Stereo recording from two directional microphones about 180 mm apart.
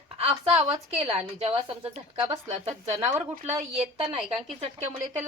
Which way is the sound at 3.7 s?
35° right (ahead or behind).